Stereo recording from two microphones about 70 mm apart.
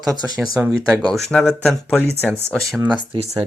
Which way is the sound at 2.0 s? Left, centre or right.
Left.